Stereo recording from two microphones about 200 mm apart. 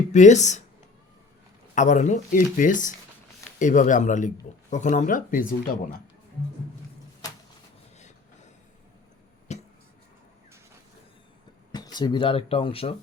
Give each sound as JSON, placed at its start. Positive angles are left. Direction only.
{"t": 0.1, "sound": "speech", "side_deg": 35}
{"t": 1.7, "sound": "speech", "side_deg": 40}
{"t": 9.5, "sound": "a sound", "side_deg": 35}
{"t": 11.7, "sound": "speech", "side_deg": 20}